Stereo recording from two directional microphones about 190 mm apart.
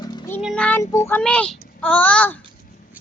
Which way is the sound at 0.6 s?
15° left (ahead or behind).